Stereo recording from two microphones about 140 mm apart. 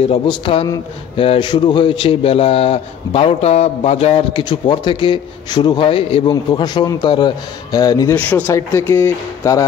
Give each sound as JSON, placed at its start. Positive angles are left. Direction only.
{"t": 0.1, "sound": "speech", "side_deg": 40}
{"t": 8.1, "sound": "speech", "side_deg": 15}